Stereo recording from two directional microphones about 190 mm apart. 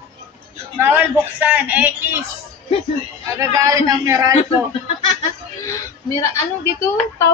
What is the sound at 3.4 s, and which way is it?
Speech, 15° right (ahead or behind).